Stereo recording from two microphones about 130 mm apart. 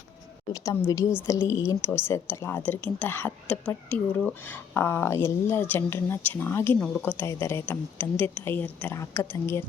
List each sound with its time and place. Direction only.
0.5 s a woman's voice: 25° left (ahead or behind)
6.7 s a woman's voice: 10° left (ahead or behind)
7.2 s a woman's voice: 20° left (ahead or behind)